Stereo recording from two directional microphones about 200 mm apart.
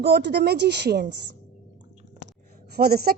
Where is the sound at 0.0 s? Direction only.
60° right (ahead or behind).